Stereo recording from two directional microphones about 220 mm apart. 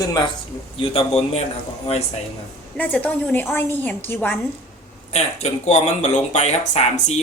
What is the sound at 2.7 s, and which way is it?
A woman's voice, 5° left (ahead or behind).